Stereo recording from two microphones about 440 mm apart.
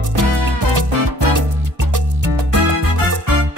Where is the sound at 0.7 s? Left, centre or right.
Right.